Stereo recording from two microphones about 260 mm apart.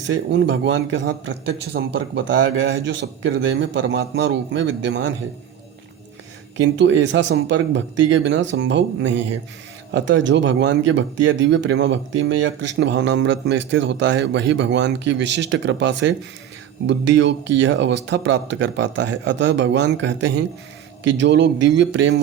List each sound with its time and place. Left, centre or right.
0.1 s a man's voice: right
6.6 s a man's voice: right